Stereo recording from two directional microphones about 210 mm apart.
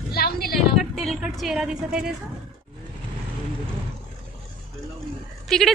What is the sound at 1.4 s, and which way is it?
Speech, 5° right (ahead or behind).